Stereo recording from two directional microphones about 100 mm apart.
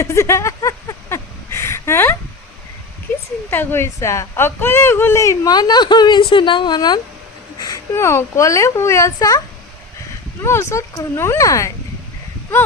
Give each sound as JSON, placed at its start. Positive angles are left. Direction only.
{"t": 0.0, "sound": "a sound", "side_deg": 30}
{"t": 3.5, "sound": "a woman's voice", "side_deg": 25}
{"t": 7.9, "sound": "a woman's voice", "side_deg": 25}
{"t": 10.4, "sound": "a woman's voice", "side_deg": 25}